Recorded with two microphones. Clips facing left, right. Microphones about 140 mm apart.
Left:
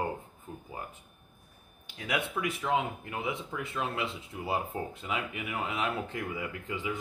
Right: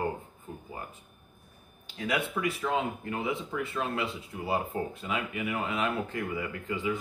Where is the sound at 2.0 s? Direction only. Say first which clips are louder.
Right 2 dB; 20° left (ahead or behind).